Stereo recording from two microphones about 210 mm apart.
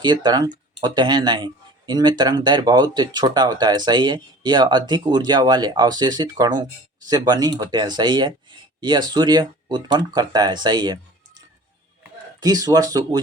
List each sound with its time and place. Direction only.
0.0 s speech: 20° right (ahead or behind)
12.4 s speech: 20° right (ahead or behind)